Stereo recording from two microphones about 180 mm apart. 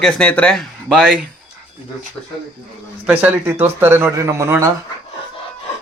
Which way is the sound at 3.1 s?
10° right (ahead or behind).